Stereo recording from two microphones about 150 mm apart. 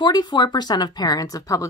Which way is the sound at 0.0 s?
30° left (ahead or behind).